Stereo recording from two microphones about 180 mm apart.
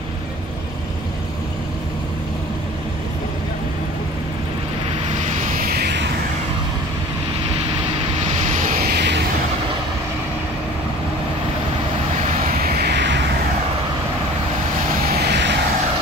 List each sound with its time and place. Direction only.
5.4 s vehicle: 50° right (ahead or behind); by 6.0 s 65° right (ahead or behind)
8.5 s vehicle: 50° right (ahead or behind); by 9.2 s 65° right (ahead or behind)
12.6 s vehicle: 70° right (ahead or behind)
15.2 s vehicle: 70° right (ahead or behind)